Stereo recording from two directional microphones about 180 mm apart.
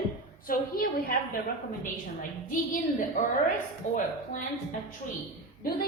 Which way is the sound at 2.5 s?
50° left (ahead or behind).